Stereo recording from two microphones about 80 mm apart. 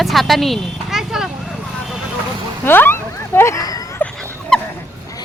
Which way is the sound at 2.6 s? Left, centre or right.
Left.